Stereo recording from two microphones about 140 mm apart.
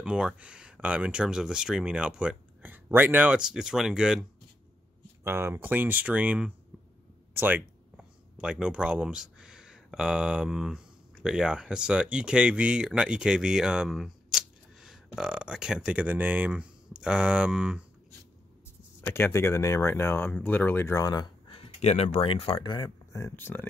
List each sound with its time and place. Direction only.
0.0 s speech: 5° right (ahead or behind)
5.2 s speech: 15° right (ahead or behind)
18.9 s speech: 15° left (ahead or behind)
21.5 s speech: 40° left (ahead or behind); by 23.7 s 15° left (ahead or behind)